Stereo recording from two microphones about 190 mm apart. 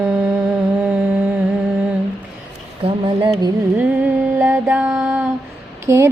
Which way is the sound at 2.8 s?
25° right (ahead or behind).